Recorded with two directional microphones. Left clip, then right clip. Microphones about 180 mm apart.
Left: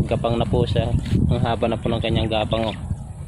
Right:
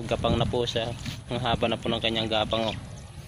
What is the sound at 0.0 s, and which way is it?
Speech, centre (ahead or behind).